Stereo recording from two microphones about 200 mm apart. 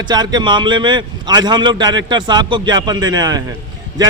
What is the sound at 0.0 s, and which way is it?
A man's voice, 20° right (ahead or behind).